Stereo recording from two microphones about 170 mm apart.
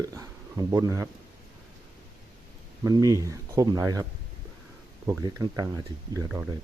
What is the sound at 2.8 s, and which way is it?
Speech, 20° right (ahead or behind).